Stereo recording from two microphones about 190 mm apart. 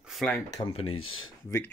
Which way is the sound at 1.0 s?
90° left.